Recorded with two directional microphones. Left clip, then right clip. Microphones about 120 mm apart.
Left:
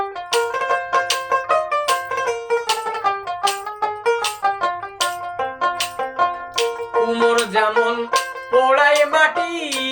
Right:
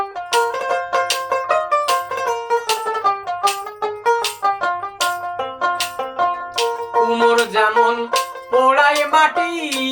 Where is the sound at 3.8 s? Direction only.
20° left (ahead or behind).